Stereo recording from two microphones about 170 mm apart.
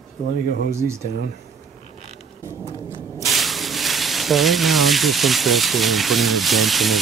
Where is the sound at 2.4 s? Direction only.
20° right (ahead or behind).